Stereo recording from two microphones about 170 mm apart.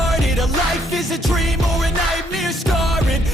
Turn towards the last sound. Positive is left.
turn(degrees=0)  # may be behind; listen again after turning